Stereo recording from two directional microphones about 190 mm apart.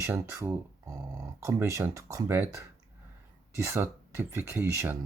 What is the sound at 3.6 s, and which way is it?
Speech, 15° right (ahead or behind).